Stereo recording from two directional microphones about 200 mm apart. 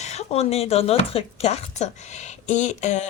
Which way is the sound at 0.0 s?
35° left (ahead or behind).